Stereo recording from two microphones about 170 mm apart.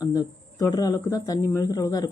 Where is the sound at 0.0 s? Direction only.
20° left (ahead or behind).